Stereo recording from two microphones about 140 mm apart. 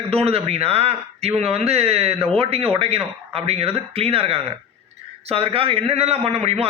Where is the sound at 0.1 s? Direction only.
45° right (ahead or behind).